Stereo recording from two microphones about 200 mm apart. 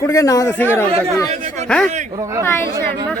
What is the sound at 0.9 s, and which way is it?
Speech, 30° right (ahead or behind).